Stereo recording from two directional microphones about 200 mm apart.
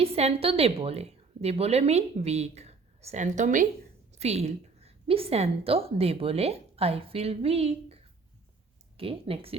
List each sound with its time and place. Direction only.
0.0 s a woman's voice: 30° right (ahead or behind)
9.0 s speech: 30° right (ahead or behind)